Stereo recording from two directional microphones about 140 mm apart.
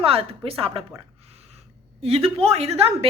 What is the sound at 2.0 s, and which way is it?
Speech, 45° right (ahead or behind).